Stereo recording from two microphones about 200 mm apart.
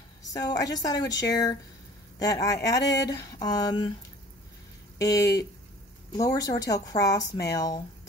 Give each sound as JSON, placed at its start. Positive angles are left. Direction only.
{"t": 0.3, "sound": "a woman's voice", "side_deg": 20}
{"t": 4.9, "sound": "speech", "side_deg": 15}